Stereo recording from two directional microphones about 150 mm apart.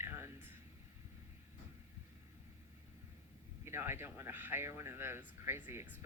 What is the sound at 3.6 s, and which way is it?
Speech, 15° right (ahead or behind).